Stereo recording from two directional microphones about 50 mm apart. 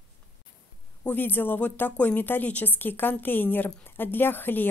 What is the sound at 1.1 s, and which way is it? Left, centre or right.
Speech, left.